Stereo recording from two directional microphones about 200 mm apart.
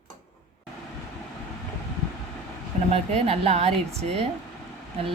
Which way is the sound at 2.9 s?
30° right (ahead or behind).